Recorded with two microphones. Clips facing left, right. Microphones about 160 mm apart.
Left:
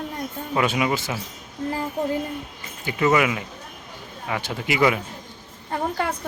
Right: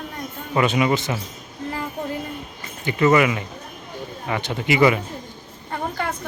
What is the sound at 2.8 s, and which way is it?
Speech, 5° left (ahead or behind).